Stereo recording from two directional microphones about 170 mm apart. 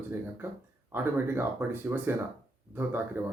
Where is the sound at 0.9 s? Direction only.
15° right (ahead or behind).